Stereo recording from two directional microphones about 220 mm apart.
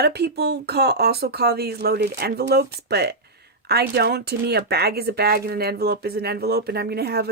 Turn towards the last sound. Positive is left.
turn(degrees=-45)  # may be behind; listen again after turning